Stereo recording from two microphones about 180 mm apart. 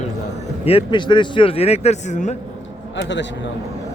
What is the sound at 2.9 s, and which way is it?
Speech, 85° left.